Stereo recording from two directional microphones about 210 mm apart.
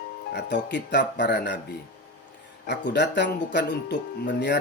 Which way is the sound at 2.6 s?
50° left (ahead or behind).